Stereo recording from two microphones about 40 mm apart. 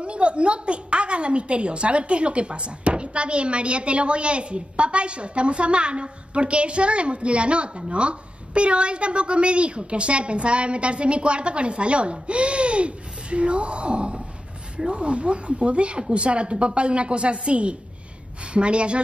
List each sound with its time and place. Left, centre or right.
0.0 s a woman's voice: right